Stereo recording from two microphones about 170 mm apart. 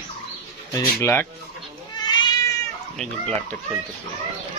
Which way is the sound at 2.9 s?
5° left (ahead or behind).